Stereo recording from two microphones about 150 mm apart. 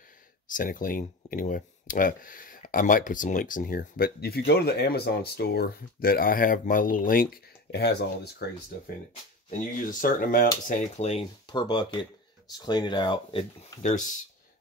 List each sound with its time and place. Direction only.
0.5 s speech: 65° left (ahead or behind); by 8.5 s 90° left
9.5 s speech: 65° left (ahead or behind)
10.7 s speech: 50° left (ahead or behind)
11.4 s speech: 30° left (ahead or behind)
13.8 s speech: 60° left (ahead or behind)